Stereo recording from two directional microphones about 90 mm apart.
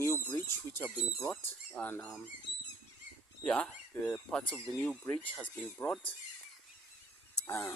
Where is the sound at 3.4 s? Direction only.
10° left (ahead or behind).